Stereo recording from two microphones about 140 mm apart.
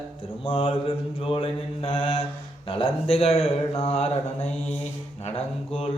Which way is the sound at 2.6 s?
40° left (ahead or behind).